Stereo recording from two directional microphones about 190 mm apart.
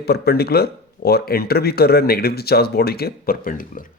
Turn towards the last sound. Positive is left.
turn(degrees=45)  # may be behind; listen again after turning